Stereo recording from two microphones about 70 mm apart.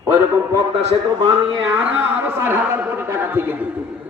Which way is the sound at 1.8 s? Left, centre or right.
Right.